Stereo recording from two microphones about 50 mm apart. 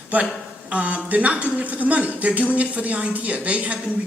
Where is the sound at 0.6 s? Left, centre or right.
Right.